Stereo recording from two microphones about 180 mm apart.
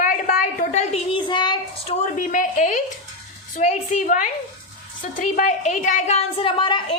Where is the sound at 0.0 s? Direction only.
50° left (ahead or behind); by 2.0 s 25° left (ahead or behind).